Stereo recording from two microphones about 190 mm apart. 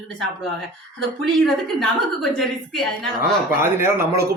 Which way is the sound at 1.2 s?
Centre (ahead or behind).